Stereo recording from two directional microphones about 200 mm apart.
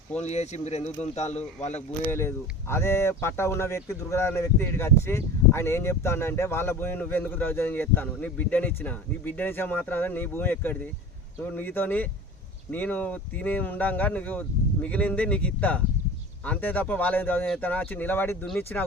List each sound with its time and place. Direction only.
0.2 s speech: 35° left (ahead or behind)
2.0 s speech: 10° left (ahead or behind)